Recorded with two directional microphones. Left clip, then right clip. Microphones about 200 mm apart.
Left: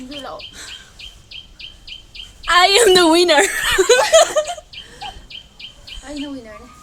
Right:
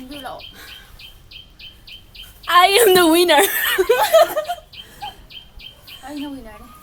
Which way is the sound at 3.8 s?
35° left (ahead or behind).